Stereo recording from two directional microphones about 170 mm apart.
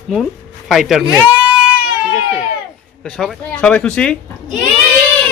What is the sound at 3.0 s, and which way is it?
Speech, 5° left (ahead or behind).